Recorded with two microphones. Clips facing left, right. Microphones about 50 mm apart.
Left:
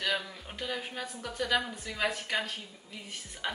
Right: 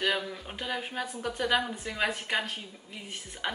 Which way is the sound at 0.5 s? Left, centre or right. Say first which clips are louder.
Left 2 dB; right.